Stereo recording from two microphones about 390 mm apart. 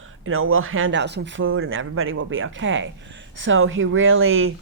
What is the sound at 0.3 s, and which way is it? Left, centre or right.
A woman's voice, right.